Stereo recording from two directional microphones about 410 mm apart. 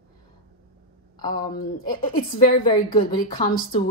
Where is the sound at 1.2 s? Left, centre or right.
Centre.